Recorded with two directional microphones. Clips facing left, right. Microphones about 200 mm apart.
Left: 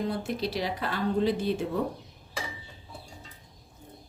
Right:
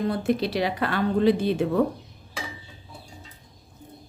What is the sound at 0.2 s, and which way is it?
A woman's voice, 65° right (ahead or behind).